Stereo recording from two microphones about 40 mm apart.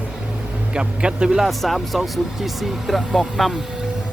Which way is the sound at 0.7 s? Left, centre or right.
Right.